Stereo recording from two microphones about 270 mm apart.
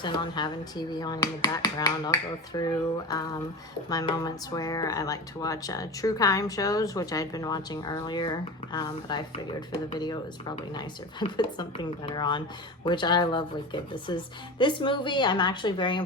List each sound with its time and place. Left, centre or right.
0.0 s speech: centre
3.8 s speech: centre